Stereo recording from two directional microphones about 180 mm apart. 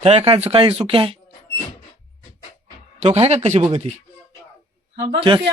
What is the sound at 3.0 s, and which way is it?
Speech, 35° right (ahead or behind).